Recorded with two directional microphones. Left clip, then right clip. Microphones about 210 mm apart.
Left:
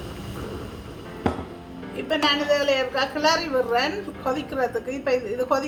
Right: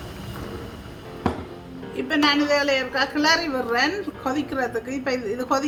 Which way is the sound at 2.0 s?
45° right (ahead or behind).